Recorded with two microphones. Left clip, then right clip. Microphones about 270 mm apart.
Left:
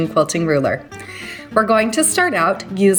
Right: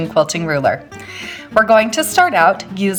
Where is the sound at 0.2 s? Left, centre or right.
Centre.